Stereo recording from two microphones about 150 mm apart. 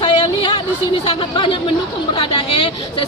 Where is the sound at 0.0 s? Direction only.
35° left (ahead or behind).